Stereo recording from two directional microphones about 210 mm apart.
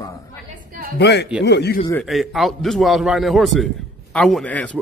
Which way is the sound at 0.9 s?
55° left (ahead or behind).